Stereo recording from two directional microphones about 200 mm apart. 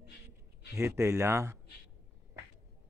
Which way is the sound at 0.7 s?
15° right (ahead or behind).